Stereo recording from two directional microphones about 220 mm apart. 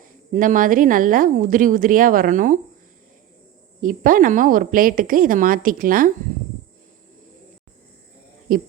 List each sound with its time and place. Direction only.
0.3 s speech: 35° right (ahead or behind)
3.8 s speech: 40° right (ahead or behind)
8.5 s speech: 40° right (ahead or behind)